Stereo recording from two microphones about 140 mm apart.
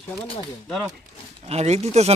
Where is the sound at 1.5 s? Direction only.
50° right (ahead or behind).